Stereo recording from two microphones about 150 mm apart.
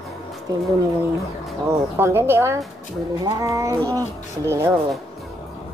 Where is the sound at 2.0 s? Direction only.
15° right (ahead or behind).